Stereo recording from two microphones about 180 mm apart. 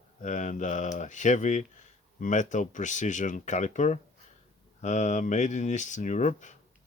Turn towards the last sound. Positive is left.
turn(degrees=40)  # may be behind; listen again after turning